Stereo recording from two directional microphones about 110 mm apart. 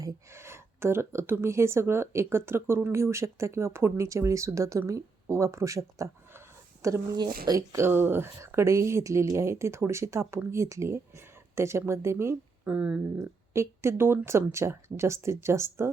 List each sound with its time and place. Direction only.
0.0 s speech: 25° right (ahead or behind)
7.2 s speech: 40° right (ahead or behind)
7.9 s speech: 20° right (ahead or behind)
12.6 s speech: 15° right (ahead or behind)
13.1 s speech: 25° right (ahead or behind)